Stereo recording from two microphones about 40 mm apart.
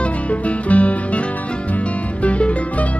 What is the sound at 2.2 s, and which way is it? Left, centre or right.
Music, left.